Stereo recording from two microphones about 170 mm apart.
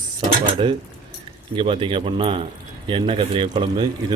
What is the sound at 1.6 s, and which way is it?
Speech, 30° right (ahead or behind).